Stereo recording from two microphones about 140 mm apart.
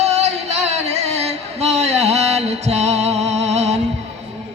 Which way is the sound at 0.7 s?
50° right (ahead or behind).